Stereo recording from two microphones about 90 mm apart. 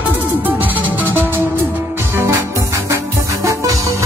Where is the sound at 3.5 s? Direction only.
35° right (ahead or behind).